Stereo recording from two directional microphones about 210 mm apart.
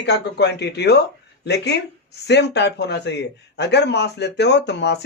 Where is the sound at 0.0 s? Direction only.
55° left (ahead or behind).